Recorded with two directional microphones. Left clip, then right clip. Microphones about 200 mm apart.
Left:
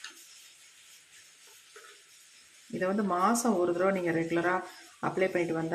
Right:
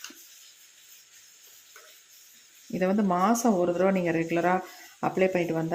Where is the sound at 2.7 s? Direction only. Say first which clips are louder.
Right 4 dB; 25° right (ahead or behind).